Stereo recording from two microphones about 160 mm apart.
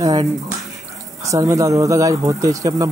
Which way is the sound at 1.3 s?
20° right (ahead or behind).